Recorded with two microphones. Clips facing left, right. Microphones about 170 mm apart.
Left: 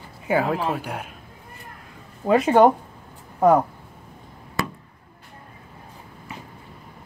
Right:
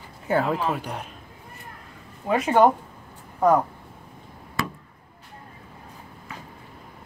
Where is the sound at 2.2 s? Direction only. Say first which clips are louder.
Left 5 dB; 40° left (ahead or behind).